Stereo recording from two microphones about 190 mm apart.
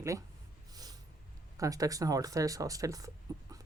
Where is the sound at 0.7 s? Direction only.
20° right (ahead or behind).